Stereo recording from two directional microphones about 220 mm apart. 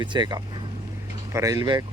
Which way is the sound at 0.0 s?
20° right (ahead or behind).